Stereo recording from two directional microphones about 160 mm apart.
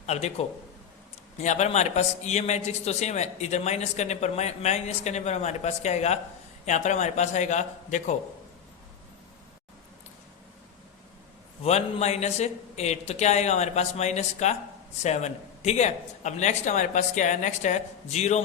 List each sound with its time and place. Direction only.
0.0 s a man's voice: 45° left (ahead or behind)
11.6 s a man's voice: 45° left (ahead or behind)